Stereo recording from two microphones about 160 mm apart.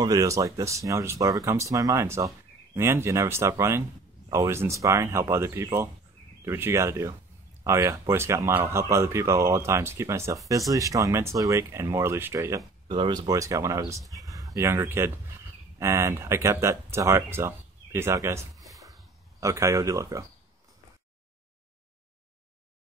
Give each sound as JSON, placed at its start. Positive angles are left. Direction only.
{"t": 0.0, "sound": "speech", "side_deg": -20}